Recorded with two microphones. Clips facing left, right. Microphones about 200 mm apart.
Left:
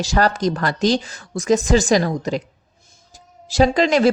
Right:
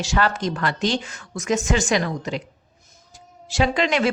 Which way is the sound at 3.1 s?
35° left (ahead or behind).